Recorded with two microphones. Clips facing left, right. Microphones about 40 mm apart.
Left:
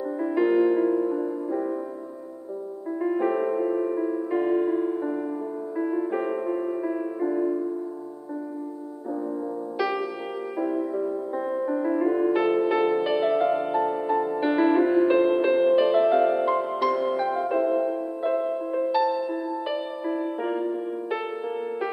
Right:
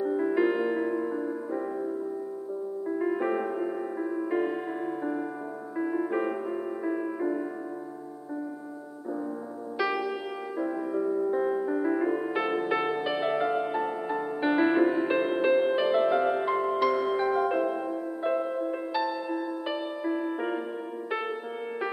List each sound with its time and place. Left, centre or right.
0.2 s music: centre
0.8 s music: centre
2.9 s music: centre
11.2 s music: centre
18.2 s music: centre